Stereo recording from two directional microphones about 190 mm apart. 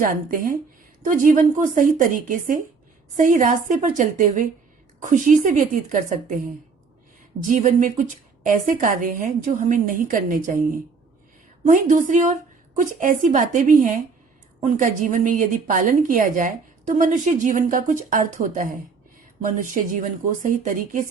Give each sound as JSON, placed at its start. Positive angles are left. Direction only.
{"t": 0.0, "sound": "a woman's voice", "side_deg": -45}
{"t": 7.4, "sound": "a woman's voice", "side_deg": -45}
{"t": 11.7, "sound": "a woman's voice", "side_deg": -40}